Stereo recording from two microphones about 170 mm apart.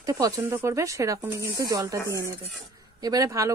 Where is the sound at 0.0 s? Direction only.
20° right (ahead or behind).